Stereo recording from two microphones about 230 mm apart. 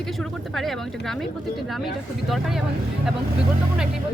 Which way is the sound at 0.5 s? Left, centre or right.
Centre.